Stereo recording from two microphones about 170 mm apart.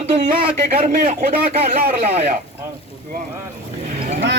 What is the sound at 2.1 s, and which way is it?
Speech, 40° right (ahead or behind).